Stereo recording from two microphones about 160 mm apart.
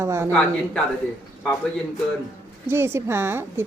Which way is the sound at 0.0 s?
15° right (ahead or behind).